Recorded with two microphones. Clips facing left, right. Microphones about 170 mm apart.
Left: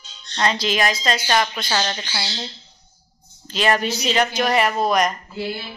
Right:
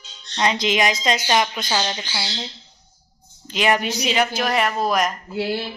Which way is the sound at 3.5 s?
15° right (ahead or behind).